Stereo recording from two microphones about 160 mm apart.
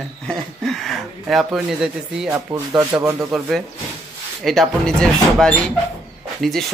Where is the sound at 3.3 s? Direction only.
Centre (ahead or behind).